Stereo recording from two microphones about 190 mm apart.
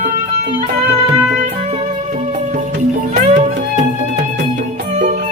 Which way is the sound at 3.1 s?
40° right (ahead or behind).